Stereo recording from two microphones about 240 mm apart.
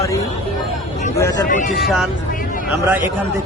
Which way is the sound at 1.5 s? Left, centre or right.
Left.